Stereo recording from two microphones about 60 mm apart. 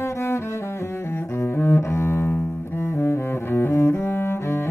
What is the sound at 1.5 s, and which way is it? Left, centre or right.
Double bass, left.